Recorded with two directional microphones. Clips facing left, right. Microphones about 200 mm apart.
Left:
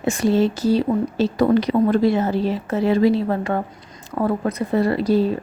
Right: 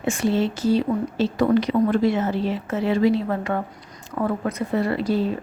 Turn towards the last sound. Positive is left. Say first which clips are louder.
# left 4 dB
turn(degrees=40)  # may be behind; listen again after turning